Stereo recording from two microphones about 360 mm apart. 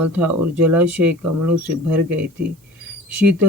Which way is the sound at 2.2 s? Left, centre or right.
Right.